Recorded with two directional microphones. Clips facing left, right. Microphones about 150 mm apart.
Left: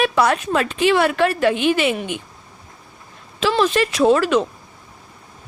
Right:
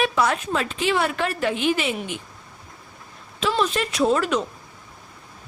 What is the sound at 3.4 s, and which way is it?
Speech, 90° left.